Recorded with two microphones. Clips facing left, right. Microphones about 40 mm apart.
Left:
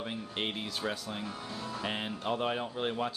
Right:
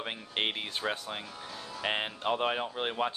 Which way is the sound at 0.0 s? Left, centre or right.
Right.